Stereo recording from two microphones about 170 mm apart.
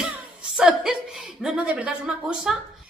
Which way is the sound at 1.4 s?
10° right (ahead or behind).